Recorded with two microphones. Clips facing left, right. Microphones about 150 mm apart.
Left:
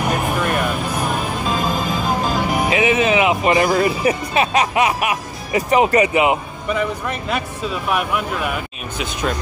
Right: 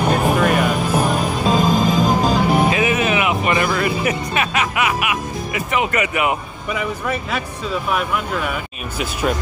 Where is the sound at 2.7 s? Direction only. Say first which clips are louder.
Left 2 dB; 25° left (ahead or behind).